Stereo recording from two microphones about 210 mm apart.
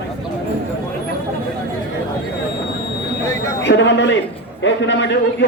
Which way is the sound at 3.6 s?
60° left (ahead or behind).